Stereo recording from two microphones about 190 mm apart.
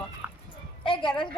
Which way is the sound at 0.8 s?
25° left (ahead or behind).